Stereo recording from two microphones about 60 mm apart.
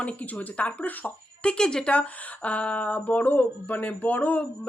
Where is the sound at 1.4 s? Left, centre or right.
Centre.